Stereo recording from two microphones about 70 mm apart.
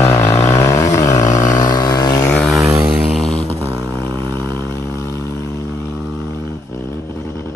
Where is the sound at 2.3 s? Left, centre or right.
Centre.